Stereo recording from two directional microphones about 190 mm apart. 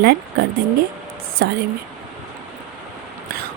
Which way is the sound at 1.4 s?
55° right (ahead or behind).